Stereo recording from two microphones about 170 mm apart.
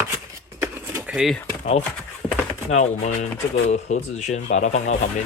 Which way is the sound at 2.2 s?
5° left (ahead or behind).